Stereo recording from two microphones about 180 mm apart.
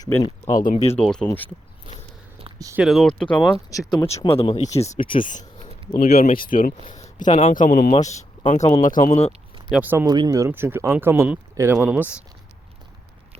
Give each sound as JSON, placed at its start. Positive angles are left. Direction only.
{"t": 0.0, "sound": "speech", "side_deg": 15}
{"t": 0.6, "sound": "speech", "side_deg": 40}
{"t": 0.9, "sound": "speech", "side_deg": 5}
{"t": 2.6, "sound": "speech", "side_deg": -20}
{"t": 2.8, "sound": "speech", "side_deg": 0}
{"t": 3.5, "sound": "speech", "side_deg": 20}
{"t": 6.3, "sound": "speech", "side_deg": 50}
{"t": 7.3, "sound": "speech", "side_deg": 30}
{"t": 7.5, "sound": "speech", "side_deg": 45}
{"t": 9.7, "sound": "speech", "side_deg": -10}
{"t": 10.1, "sound": "speech", "side_deg": -20}